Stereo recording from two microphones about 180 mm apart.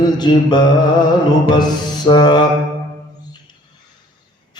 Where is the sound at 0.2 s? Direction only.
25° left (ahead or behind).